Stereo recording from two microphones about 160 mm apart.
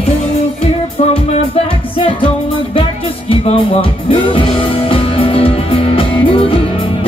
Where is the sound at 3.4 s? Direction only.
35° left (ahead or behind).